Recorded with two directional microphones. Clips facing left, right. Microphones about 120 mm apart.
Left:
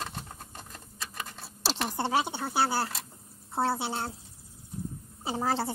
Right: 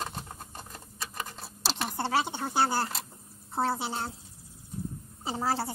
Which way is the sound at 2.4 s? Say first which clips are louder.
Right 1 dB; 5° left (ahead or behind).